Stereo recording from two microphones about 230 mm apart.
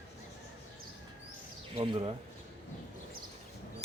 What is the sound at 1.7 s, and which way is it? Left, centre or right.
Speech, right.